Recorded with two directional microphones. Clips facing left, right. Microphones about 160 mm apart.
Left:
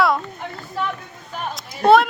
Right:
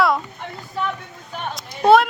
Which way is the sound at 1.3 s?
Centre (ahead or behind).